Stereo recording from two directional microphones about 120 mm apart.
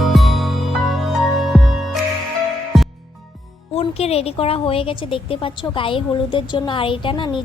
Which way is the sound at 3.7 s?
60° left (ahead or behind).